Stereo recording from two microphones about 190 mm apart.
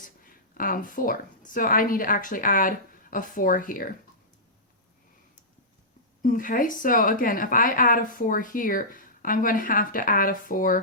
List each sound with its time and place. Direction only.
0.0 s speech: 50° left (ahead or behind)
6.2 s a woman's voice: 45° left (ahead or behind)